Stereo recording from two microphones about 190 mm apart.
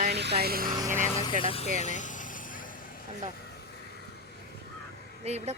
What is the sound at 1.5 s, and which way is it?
Speech, 30° left (ahead or behind).